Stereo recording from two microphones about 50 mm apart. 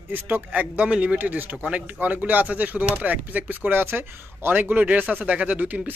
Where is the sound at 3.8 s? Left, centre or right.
Right.